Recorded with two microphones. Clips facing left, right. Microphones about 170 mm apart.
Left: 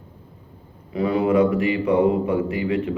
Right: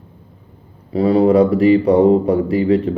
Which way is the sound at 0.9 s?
35° right (ahead or behind).